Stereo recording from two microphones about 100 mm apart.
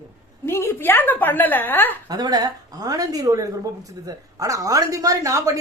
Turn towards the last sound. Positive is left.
turn(degrees=-30)  # may be behind; listen again after turning